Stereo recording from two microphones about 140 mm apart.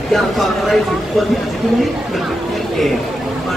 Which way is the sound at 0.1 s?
Centre (ahead or behind).